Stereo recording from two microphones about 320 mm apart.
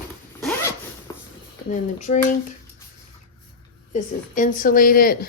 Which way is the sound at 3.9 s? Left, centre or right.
Left.